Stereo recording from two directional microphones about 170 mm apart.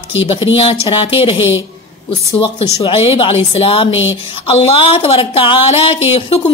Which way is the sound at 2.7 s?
30° left (ahead or behind).